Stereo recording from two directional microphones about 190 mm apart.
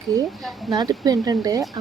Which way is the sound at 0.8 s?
20° right (ahead or behind).